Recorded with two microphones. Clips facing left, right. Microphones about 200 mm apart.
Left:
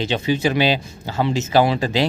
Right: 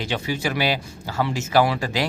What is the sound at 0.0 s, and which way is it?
Speech, 20° left (ahead or behind).